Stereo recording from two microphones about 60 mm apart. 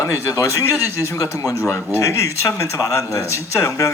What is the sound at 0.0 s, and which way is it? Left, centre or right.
Speech, left.